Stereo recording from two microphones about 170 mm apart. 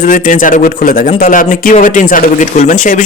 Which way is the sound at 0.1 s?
50° left (ahead or behind).